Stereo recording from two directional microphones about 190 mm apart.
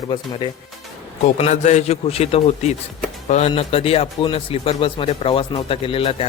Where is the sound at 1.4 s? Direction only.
40° left (ahead or behind).